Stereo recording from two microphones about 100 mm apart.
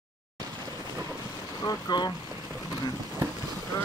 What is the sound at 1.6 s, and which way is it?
Speech, 40° left (ahead or behind).